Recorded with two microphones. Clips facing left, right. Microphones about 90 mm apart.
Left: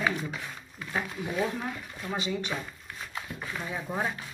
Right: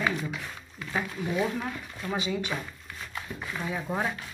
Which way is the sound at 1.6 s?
5° left (ahead or behind).